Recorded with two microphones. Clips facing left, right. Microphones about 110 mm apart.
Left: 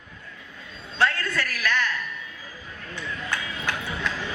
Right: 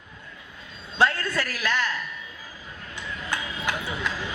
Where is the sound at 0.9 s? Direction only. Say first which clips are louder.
Right 1 dB; 20° right (ahead or behind).